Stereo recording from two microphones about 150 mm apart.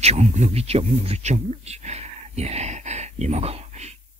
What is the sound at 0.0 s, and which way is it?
Speech, 45° right (ahead or behind).